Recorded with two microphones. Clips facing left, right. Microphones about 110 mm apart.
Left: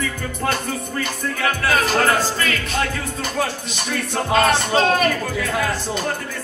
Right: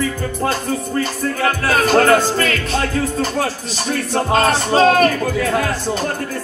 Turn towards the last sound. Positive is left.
turn(degrees=-45)  # may be behind; listen again after turning